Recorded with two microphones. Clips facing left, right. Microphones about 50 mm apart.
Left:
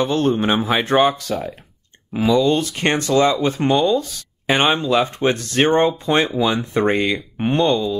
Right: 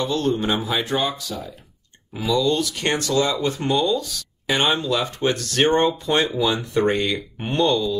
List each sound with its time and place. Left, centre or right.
0.0 s speech: left
2.1 s speech: left